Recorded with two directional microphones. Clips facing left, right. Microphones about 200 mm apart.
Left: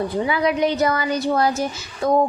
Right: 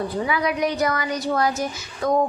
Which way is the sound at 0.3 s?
25° left (ahead or behind).